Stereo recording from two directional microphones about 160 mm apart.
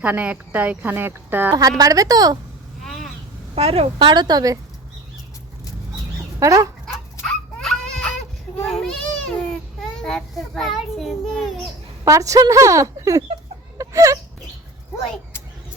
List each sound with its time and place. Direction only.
0.0 s a woman's voice: 10° right (ahead or behind)
2.8 s a sound: centre (ahead or behind)
3.5 s a woman's voice: 40° right (ahead or behind)
6.4 s speech: 20° right (ahead or behind)
6.8 s goat: 5° left (ahead or behind)
8.6 s a sound: centre (ahead or behind)
10.0 s a child's voice: centre (ahead or behind)
12.0 s a woman's voice: 20° right (ahead or behind)
13.7 s whimper: 20° right (ahead or behind)